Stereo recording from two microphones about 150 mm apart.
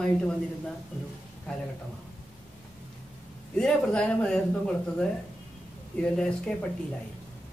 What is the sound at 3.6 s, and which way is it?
A man's voice, 5° left (ahead or behind).